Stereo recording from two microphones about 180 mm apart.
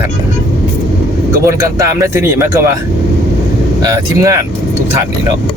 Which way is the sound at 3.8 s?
20° right (ahead or behind).